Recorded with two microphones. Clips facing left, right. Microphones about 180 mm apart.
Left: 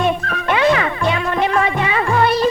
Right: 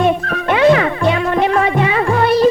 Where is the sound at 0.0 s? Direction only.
45° right (ahead or behind).